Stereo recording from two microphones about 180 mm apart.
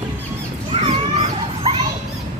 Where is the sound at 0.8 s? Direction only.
30° right (ahead or behind).